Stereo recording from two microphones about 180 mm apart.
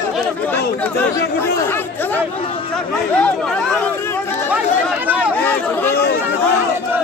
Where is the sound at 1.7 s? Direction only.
10° left (ahead or behind).